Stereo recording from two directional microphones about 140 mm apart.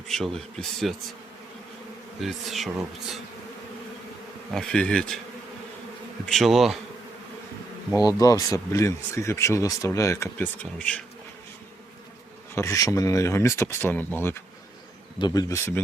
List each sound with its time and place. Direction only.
0.1 s speech: 5° left (ahead or behind)
2.2 s speech: centre (ahead or behind)
4.5 s speech: 5° left (ahead or behind)
6.2 s speech: centre (ahead or behind)
7.9 s speech: 25° left (ahead or behind); by 11.0 s 10° left (ahead or behind)
12.5 s speech: 25° left (ahead or behind)
15.2 s speech: 25° left (ahead or behind)